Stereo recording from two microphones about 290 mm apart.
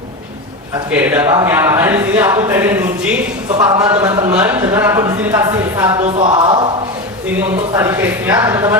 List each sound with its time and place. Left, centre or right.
0.9 s speech: centre
6.1 s speech: centre